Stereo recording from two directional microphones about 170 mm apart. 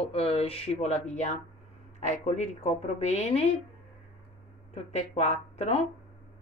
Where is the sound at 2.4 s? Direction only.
40° left (ahead or behind).